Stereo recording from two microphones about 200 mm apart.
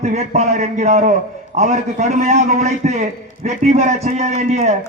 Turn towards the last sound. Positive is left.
turn(degrees=-35)  # may be behind; listen again after turning